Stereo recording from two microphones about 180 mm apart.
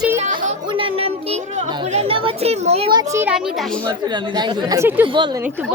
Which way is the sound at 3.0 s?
15° right (ahead or behind).